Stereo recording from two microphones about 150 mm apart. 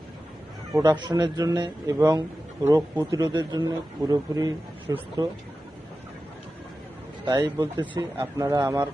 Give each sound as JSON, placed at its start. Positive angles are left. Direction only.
{"t": 0.7, "sound": "a man's voice", "side_deg": -25}
{"t": 7.3, "sound": "a man's voice", "side_deg": -30}